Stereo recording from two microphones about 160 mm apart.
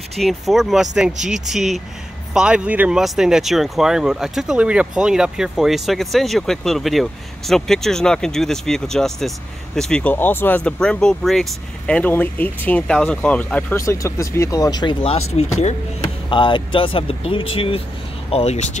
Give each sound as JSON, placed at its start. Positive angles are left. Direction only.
{"t": 0.1, "sound": "speech", "side_deg": 0}
{"t": 16.3, "sound": "speech", "side_deg": 30}